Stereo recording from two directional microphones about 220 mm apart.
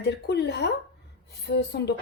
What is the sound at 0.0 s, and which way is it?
Speech, 50° left (ahead or behind).